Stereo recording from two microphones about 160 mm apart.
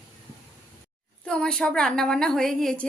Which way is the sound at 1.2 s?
5° left (ahead or behind).